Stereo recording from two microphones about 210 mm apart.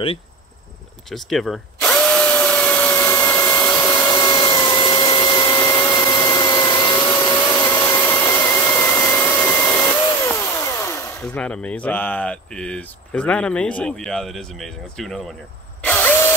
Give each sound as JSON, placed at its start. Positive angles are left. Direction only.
{"t": 1.1, "sound": "drill", "side_deg": 0}
{"t": 7.4, "sound": "vacuum cleaner", "side_deg": 15}
{"t": 15.8, "sound": "a sound", "side_deg": 10}